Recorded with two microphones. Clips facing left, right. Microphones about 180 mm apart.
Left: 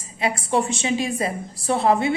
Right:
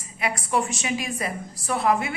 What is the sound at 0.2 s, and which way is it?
A woman's voice, 25° left (ahead or behind).